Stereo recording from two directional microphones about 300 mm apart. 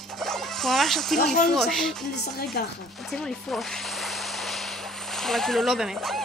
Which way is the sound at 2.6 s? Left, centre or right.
Left.